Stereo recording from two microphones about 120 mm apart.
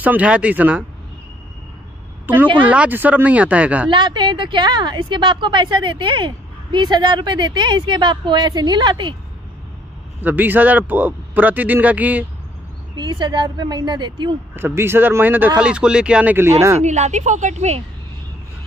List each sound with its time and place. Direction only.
0.0 s a man's voice: 10° right (ahead or behind)
2.3 s a man's voice: 15° right (ahead or behind)
3.9 s speech: 40° right (ahead or behind)
10.2 s a man's voice: 15° right (ahead or behind)
12.9 s speech: 40° right (ahead or behind)
14.5 s a man's voice: 20° right (ahead or behind)
16.8 s speech: 70° right (ahead or behind)